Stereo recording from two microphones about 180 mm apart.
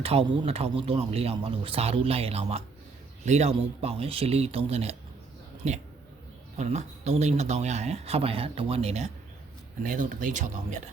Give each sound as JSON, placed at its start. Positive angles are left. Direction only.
{"t": 0.0, "sound": "speech", "side_deg": -35}
{"t": 9.8, "sound": "speech", "side_deg": -50}